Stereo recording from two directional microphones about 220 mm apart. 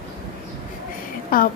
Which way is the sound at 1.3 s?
40° left (ahead or behind).